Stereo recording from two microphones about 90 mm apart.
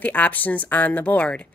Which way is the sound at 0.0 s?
15° left (ahead or behind).